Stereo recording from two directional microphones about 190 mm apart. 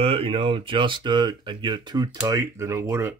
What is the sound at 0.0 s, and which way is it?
Speech, 30° right (ahead or behind).